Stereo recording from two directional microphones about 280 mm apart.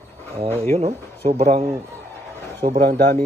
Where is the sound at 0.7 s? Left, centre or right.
Right.